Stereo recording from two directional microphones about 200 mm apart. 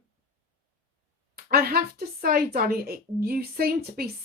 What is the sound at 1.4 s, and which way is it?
A woman's voice, 50° right (ahead or behind).